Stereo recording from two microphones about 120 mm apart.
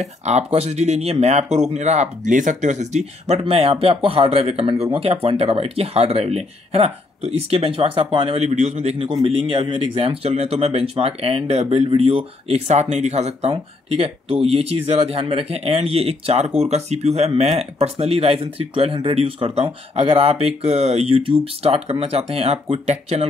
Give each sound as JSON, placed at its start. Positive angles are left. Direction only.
{"t": 0.0, "sound": "speech", "side_deg": -70}
{"t": 3.3, "sound": "speech", "side_deg": -60}
{"t": 8.5, "sound": "speech", "side_deg": -70}
{"t": 9.2, "sound": "speech", "side_deg": -50}